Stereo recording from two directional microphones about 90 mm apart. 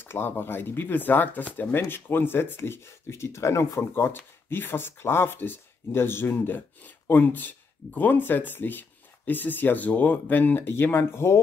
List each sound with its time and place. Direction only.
0.0 s speech: 25° left (ahead or behind)